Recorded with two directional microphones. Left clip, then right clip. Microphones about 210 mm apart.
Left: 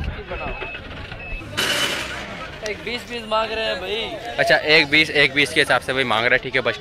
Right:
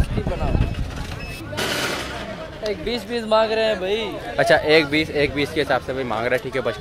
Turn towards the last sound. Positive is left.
turn(degrees=0)  # may be behind; listen again after turning